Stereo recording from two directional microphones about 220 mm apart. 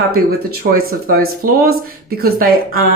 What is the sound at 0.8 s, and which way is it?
Speech, 45° right (ahead or behind).